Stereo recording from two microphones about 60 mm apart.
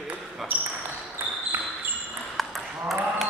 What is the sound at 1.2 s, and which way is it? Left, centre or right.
Basketball bounce, right.